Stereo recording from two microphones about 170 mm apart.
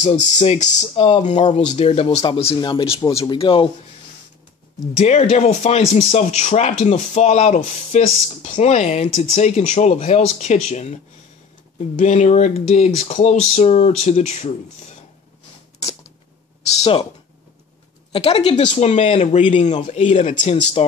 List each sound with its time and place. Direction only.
0.0 s speech: 40° left (ahead or behind)
4.9 s speech: 40° left (ahead or behind)
12.0 s speech: 45° left (ahead or behind)
16.8 s speech: 35° left (ahead or behind)
18.1 s speech: 35° left (ahead or behind)